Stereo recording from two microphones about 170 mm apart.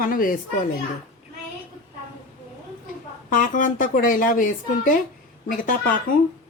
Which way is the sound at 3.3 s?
50° left (ahead or behind).